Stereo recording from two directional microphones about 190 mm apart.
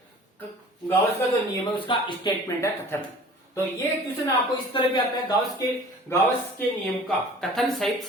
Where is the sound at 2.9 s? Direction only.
10° left (ahead or behind).